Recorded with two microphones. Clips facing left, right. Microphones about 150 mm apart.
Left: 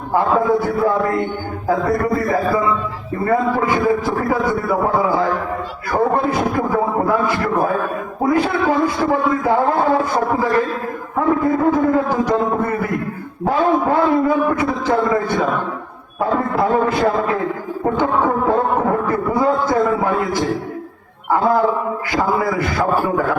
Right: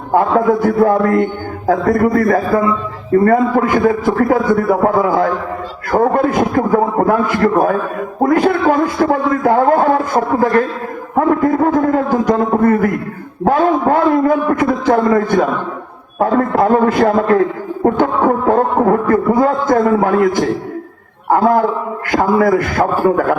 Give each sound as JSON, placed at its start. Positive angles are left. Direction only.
{"t": 0.1, "sound": "a man's voice", "side_deg": -55}
{"t": 11.1, "sound": "a man's voice", "side_deg": -55}